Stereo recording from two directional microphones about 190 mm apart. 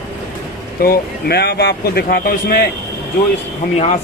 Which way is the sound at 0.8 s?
55° left (ahead or behind).